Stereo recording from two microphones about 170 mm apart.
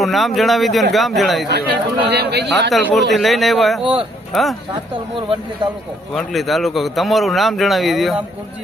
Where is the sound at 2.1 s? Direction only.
75° right (ahead or behind).